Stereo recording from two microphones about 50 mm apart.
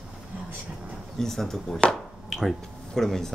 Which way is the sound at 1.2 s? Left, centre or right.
Centre.